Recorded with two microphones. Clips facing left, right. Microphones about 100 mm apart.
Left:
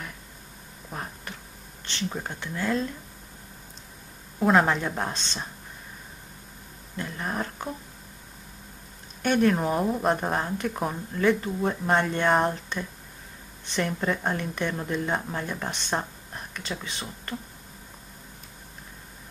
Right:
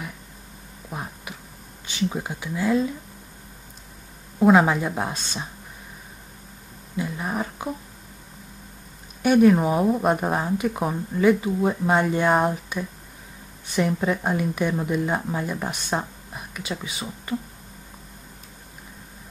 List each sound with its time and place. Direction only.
0.8 s a sound: 10° right (ahead or behind)
1.9 s speech: 10° right (ahead or behind)
4.4 s speech: 5° right (ahead or behind)
7.0 s speech: 5° right (ahead or behind)
9.2 s speech: 5° right (ahead or behind)